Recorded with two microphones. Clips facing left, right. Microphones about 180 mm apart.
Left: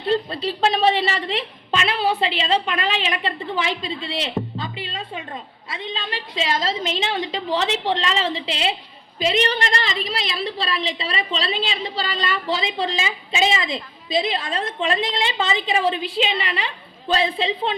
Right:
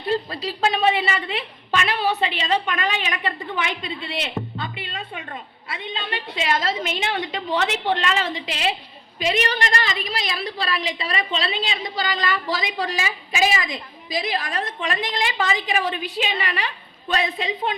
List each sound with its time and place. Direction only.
0.1 s a woman's voice: 30° left (ahead or behind)